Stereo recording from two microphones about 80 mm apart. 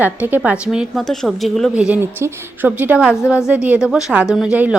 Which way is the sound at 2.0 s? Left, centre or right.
Right.